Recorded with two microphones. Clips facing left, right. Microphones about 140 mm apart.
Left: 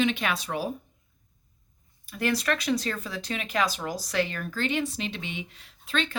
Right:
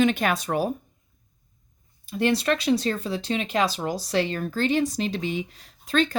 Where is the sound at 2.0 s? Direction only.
25° right (ahead or behind).